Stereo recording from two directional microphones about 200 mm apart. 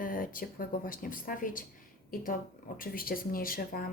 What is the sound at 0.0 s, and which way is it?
Speech, 45° left (ahead or behind).